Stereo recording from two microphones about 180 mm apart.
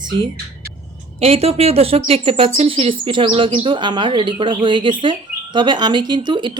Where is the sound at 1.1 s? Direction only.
35° right (ahead or behind).